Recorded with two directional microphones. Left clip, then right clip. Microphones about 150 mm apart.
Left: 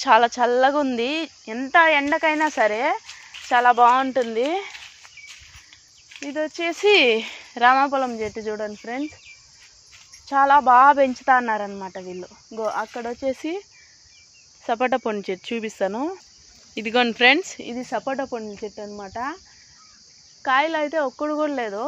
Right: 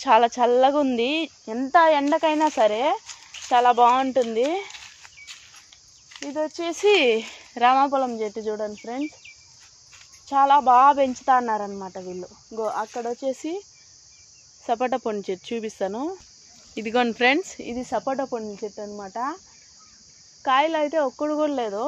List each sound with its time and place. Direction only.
0.0 s speech: 10° left (ahead or behind)
6.2 s speech: 20° left (ahead or behind)
10.2 s speech: 25° left (ahead or behind)
14.7 s speech: 30° left (ahead or behind)
16.7 s speech: 20° left (ahead or behind)
20.4 s speech: 10° left (ahead or behind)